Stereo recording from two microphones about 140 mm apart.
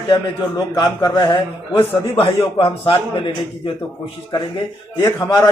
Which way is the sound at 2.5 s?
40° left (ahead or behind).